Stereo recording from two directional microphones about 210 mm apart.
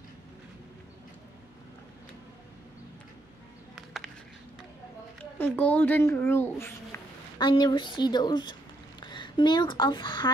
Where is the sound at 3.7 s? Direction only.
Centre (ahead or behind).